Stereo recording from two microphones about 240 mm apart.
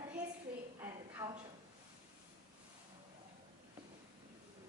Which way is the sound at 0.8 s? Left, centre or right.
Centre.